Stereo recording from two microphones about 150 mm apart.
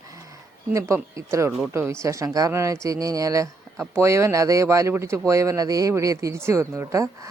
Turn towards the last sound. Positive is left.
turn(degrees=-20)  # may be behind; listen again after turning